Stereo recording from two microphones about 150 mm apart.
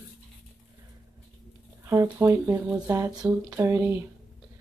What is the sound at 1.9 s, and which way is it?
Speech, 20° right (ahead or behind).